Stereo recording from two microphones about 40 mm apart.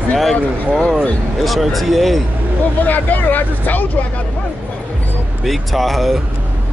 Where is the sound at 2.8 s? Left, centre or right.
Left.